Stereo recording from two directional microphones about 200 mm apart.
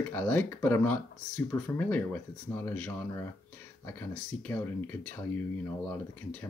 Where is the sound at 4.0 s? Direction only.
10° left (ahead or behind).